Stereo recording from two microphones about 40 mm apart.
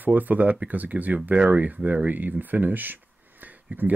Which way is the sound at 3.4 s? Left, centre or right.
Right.